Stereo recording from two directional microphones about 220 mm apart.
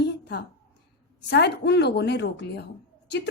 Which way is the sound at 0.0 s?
50° left (ahead or behind).